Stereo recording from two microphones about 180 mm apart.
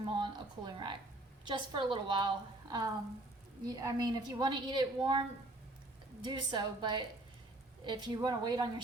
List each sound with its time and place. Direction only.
0.0 s a woman's voice: 25° right (ahead or behind)
6.2 s a woman's voice: 25° right (ahead or behind)